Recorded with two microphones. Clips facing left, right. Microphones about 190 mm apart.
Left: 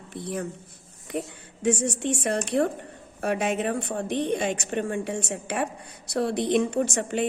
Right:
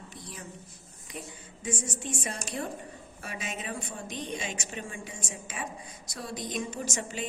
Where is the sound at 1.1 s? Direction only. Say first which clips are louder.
Left 11 dB; 70° left (ahead or behind).